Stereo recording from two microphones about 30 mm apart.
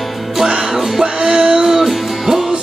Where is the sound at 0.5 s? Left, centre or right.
Centre.